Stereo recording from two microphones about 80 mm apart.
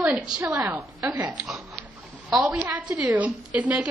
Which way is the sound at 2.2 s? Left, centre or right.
Right.